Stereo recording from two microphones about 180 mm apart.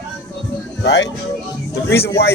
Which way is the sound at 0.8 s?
75° left (ahead or behind).